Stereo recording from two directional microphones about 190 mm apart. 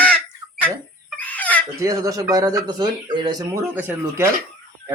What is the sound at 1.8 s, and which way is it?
Speech, 20° right (ahead or behind).